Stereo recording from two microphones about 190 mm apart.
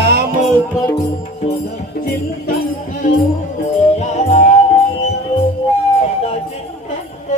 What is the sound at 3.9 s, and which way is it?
Music, 35° left (ahead or behind).